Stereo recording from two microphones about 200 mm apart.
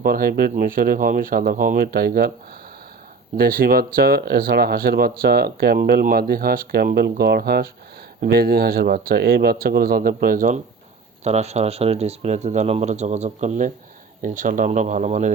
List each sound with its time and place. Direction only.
0.0 s speech: 45° right (ahead or behind)
3.3 s speech: 45° right (ahead or behind)